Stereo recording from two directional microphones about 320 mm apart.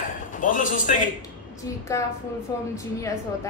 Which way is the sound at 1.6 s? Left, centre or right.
Centre.